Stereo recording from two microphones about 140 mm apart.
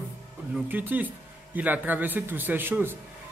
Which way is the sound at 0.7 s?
10° right (ahead or behind).